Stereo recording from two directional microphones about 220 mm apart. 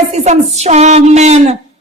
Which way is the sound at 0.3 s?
30° right (ahead or behind).